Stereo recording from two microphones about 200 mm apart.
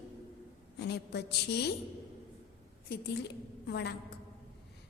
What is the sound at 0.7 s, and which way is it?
Speech, 55° left (ahead or behind).